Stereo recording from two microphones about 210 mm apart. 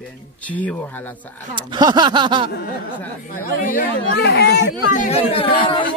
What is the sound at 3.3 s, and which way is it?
Speech, 40° left (ahead or behind).